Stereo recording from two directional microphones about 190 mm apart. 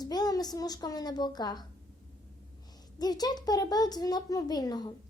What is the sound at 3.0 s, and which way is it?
A woman's voice, 20° left (ahead or behind).